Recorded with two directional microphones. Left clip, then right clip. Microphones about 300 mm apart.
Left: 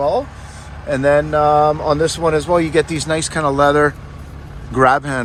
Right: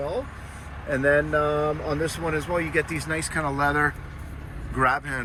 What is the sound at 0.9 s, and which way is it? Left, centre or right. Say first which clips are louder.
Speech: left 7 dB; left.